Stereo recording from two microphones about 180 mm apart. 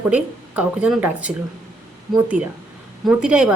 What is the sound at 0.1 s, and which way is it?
A woman's voice, 5° right (ahead or behind).